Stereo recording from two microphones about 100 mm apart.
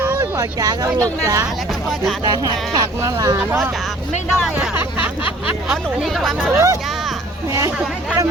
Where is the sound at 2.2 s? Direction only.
40° right (ahead or behind).